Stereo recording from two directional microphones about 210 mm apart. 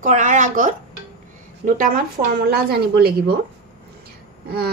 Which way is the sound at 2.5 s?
45° right (ahead or behind).